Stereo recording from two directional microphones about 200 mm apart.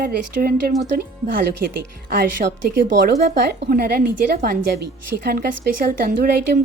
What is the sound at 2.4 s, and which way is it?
A woman's voice, 40° right (ahead or behind).